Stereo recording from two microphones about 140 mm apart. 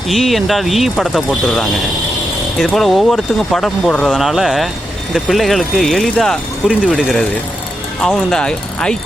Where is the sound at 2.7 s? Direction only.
Centre (ahead or behind).